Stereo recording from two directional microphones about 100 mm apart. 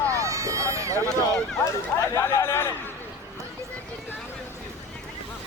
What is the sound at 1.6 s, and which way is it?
Speech, 25° left (ahead or behind).